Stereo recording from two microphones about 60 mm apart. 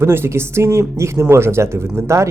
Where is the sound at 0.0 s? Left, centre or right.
Right.